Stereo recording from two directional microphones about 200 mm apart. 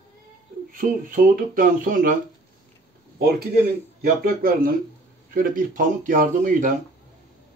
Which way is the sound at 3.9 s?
50° right (ahead or behind).